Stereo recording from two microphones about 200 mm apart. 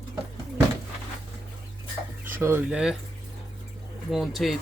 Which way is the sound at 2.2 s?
10° right (ahead or behind).